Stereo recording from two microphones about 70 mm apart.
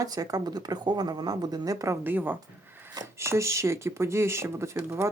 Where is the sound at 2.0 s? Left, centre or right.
Right.